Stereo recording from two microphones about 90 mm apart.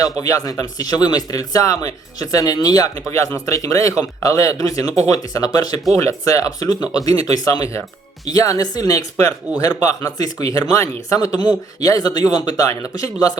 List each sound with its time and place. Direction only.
0.0 s a man's voice: 40° left (ahead or behind)
3.1 s a man's voice: 35° left (ahead or behind)
11.3 s a man's voice: 50° left (ahead or behind)